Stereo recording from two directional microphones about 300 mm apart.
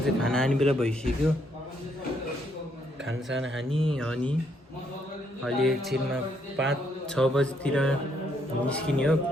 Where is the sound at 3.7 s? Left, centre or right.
Centre.